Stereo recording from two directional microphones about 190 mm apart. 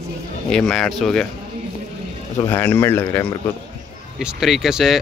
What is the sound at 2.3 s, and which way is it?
Speech, 15° left (ahead or behind).